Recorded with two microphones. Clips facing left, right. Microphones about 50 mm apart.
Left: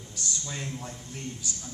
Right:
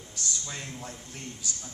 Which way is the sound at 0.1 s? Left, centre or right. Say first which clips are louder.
Left 1 dB; centre.